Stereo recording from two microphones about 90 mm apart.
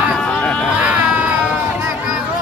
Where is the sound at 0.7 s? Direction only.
15° right (ahead or behind).